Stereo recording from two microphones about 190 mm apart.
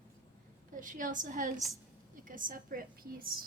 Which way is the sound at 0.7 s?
45° right (ahead or behind).